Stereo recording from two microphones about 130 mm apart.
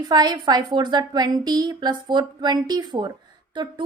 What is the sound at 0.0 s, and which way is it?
A woman's voice, 30° right (ahead or behind).